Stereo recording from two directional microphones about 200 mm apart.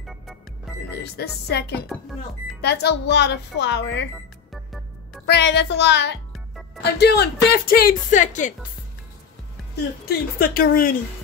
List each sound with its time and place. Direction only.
0.9 s speech: 55° left (ahead or behind)
5.2 s speech: 60° left (ahead or behind)
6.3 s music: centre (ahead or behind)
6.8 s speech: 55° left (ahead or behind); by 8.5 s 40° left (ahead or behind)
10.0 s speech: 50° left (ahead or behind)